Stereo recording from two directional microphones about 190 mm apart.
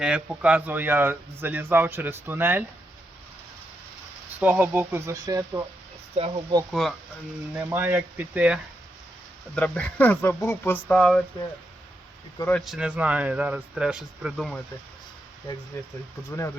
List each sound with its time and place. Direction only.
0.0 s speech: 5° right (ahead or behind)
4.4 s speech: 10° right (ahead or behind)
6.1 s speech: 35° right (ahead or behind)
6.7 s speech: centre (ahead or behind)
7.5 s speech: 10° right (ahead or behind)
9.6 s speech: 5° left (ahead or behind)
12.5 s speech: centre (ahead or behind)
15.7 s speech: 15° left (ahead or behind)